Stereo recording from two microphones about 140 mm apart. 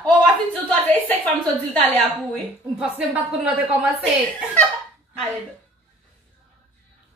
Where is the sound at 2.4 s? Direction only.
10° right (ahead or behind).